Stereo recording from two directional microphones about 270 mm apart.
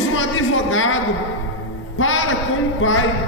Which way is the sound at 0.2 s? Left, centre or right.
Left.